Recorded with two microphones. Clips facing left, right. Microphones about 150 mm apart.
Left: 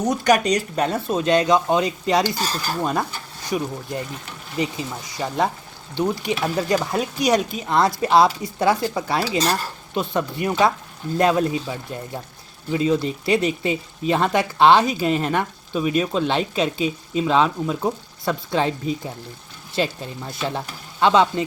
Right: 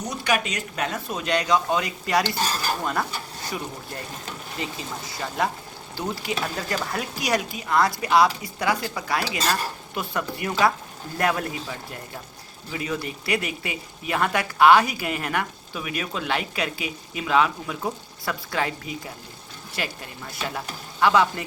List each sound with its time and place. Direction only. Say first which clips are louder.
0.1 s speech: left 7 dB; 40° left (ahead or behind); by 4.9 s 20° left (ahead or behind)
5.9 s speech: left 6 dB; 20° left (ahead or behind)